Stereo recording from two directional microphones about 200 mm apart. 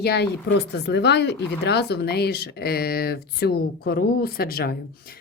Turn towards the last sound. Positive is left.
turn(degrees=50)  # may be behind; listen again after turning